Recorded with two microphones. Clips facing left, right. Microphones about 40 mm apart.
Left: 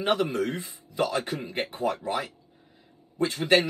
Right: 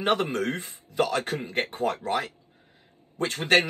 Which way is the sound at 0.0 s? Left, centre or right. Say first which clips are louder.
Even; right.